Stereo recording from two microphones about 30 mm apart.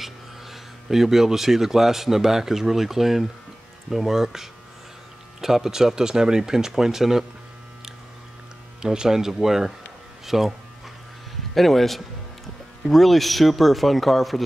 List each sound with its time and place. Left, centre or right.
0.0 s speech: centre
8.8 s speech: right
11.5 s speech: centre